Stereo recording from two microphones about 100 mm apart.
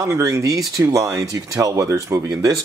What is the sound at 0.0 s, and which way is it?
Speech, 30° right (ahead or behind).